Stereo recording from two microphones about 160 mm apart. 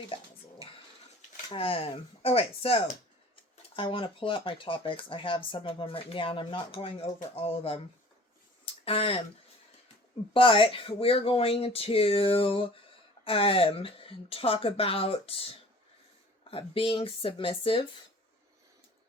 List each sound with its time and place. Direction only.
1.5 s speech: 35° left (ahead or behind)
8.6 s a sound: 35° left (ahead or behind)
10.3 s speech: 35° left (ahead or behind)